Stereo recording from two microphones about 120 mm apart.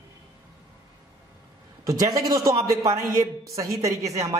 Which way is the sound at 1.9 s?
30° right (ahead or behind).